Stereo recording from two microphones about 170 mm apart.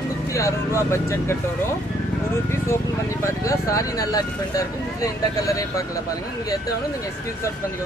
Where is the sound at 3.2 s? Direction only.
20° left (ahead or behind).